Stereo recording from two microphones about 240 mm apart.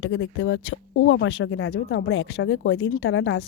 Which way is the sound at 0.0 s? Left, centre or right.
Left.